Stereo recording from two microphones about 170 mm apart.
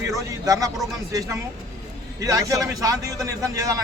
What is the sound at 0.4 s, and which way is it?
Speech, 20° right (ahead or behind).